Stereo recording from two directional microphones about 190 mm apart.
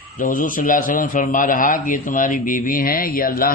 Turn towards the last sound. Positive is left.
turn(degrees=50)  # may be behind; listen again after turning